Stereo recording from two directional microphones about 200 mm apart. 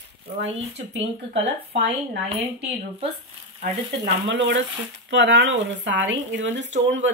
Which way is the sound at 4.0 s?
60° right (ahead or behind).